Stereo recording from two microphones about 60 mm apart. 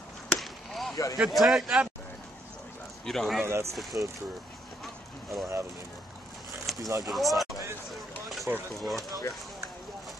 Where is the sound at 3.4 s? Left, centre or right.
Right.